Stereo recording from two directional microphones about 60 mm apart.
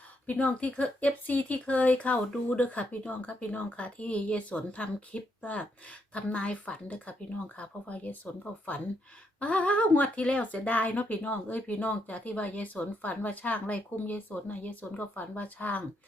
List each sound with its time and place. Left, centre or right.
0.3 s speech: left